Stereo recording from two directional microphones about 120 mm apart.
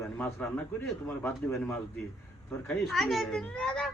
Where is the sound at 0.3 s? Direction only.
20° left (ahead or behind).